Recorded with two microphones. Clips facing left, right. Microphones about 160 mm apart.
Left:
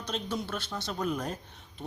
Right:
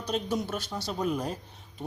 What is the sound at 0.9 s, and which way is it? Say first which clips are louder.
Speech: right 2 dB; 5° right (ahead or behind).